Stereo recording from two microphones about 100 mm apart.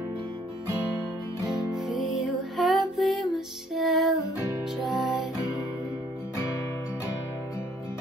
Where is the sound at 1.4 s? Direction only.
5° right (ahead or behind).